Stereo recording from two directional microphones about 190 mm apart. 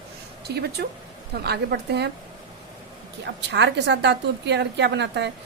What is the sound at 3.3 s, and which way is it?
A woman's voice, 65° right (ahead or behind).